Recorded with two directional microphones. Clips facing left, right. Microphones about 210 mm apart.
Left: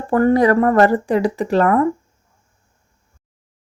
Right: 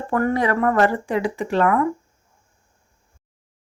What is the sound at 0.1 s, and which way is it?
Speech, 35° left (ahead or behind).